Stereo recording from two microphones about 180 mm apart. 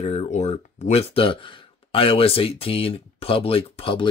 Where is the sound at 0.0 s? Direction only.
35° left (ahead or behind).